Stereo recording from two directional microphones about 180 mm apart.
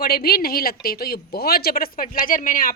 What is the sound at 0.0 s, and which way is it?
A woman's voice, 60° left (ahead or behind).